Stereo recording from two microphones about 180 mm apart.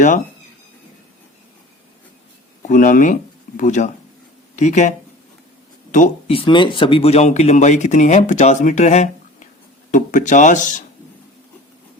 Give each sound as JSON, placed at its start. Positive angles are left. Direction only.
{"t": 2.6, "sound": "speech", "side_deg": 45}
{"t": 6.3, "sound": "speech", "side_deg": 25}